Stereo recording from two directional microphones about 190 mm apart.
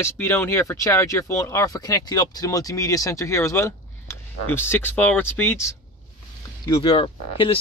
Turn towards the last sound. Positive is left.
turn(degrees=25)  # may be behind; listen again after turning